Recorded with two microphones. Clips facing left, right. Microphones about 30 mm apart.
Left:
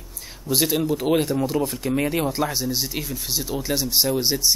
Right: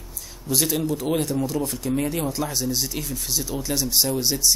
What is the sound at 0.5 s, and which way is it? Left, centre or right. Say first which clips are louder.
Speech: left 2 dB; centre.